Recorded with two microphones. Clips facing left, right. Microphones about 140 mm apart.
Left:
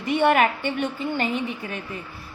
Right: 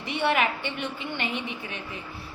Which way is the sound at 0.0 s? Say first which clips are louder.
Left 6 dB; 50° left (ahead or behind).